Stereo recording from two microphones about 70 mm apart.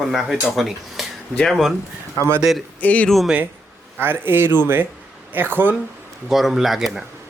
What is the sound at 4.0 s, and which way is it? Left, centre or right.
A man's voice, right.